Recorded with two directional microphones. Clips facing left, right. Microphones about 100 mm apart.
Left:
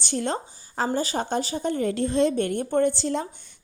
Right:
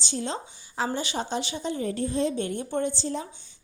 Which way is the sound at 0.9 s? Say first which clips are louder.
Left 4 dB; 45° left (ahead or behind).